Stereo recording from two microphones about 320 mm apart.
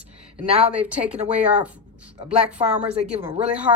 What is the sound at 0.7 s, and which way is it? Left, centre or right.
Speech, centre.